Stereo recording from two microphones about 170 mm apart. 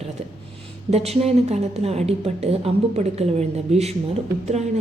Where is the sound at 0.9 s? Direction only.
40° right (ahead or behind).